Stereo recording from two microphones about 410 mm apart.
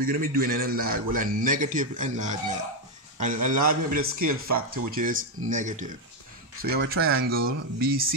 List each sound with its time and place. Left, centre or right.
0.0 s speech: right
3.4 s speech: centre